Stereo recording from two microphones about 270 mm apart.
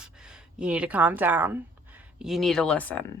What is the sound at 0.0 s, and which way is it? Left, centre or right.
A woman's voice, centre.